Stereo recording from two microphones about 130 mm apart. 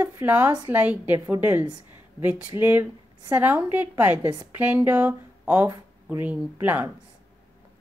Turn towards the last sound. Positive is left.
turn(degrees=-15)  # may be behind; listen again after turning